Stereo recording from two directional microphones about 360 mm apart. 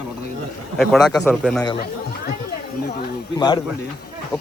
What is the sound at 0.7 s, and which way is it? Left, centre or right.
Speech, centre.